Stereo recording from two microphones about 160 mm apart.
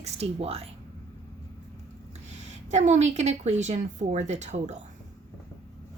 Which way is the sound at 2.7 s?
45° right (ahead or behind).